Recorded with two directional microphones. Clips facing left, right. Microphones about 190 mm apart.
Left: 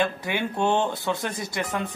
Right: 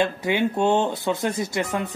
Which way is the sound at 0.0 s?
20° right (ahead or behind).